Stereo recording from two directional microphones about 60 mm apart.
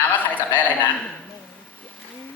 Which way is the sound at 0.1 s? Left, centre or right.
Left.